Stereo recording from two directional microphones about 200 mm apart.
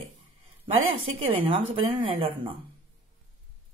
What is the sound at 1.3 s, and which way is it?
Speech, 25° right (ahead or behind).